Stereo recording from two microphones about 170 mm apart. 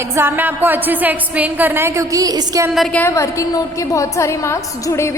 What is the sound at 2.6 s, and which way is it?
Speech, centre (ahead or behind).